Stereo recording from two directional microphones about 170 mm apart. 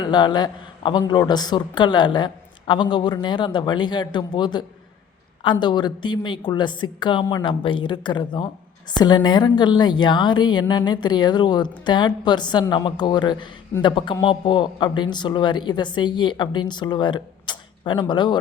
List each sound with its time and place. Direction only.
0.0 s a woman's voice: 25° left (ahead or behind)